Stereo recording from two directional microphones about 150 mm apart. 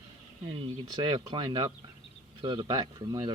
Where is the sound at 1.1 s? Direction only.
30° right (ahead or behind).